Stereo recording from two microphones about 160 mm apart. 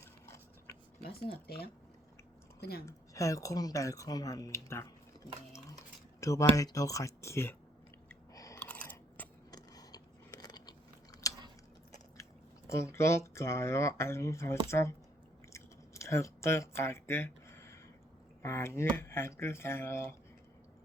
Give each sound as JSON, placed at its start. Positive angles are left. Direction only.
{"t": 1.0, "sound": "speech", "side_deg": 75}
{"t": 2.8, "sound": "speech", "side_deg": 20}
{"t": 6.1, "sound": "speech", "side_deg": 20}
{"t": 8.3, "sound": "chewing", "side_deg": 20}
{"t": 8.5, "sound": "chewing", "side_deg": 10}
{"t": 9.5, "sound": "a sound", "side_deg": 25}
{"t": 11.2, "sound": "chewing", "side_deg": 20}
{"t": 12.6, "sound": "speech", "side_deg": 20}
{"t": 15.5, "sound": "chewing", "side_deg": 20}
{"t": 18.4, "sound": "speech", "side_deg": 15}